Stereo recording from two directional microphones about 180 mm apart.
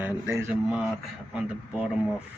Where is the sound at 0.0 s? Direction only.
10° right (ahead or behind).